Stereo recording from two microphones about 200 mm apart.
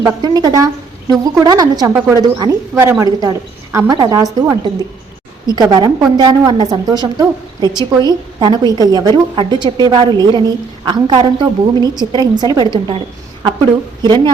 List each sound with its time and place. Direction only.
0.0 s a woman's voice: 20° right (ahead or behind)